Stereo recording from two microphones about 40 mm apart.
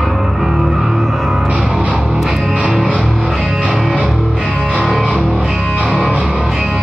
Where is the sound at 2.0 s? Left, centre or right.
Centre.